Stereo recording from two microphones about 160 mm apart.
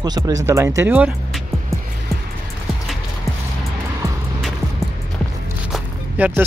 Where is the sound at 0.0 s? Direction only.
25° right (ahead or behind).